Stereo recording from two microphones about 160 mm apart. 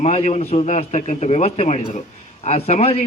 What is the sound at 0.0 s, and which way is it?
A man's voice, 45° left (ahead or behind).